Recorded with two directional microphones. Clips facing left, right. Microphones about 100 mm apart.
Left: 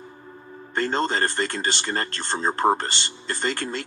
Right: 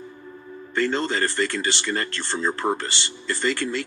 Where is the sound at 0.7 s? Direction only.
45° left (ahead or behind).